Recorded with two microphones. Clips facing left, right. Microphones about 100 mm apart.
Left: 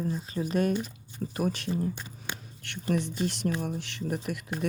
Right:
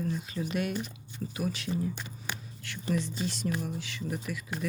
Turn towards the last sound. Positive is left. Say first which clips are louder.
# left 3 dB
turn(degrees=55)  # may be behind; listen again after turning